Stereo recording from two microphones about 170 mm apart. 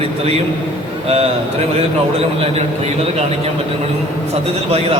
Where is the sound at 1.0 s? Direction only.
35° right (ahead or behind).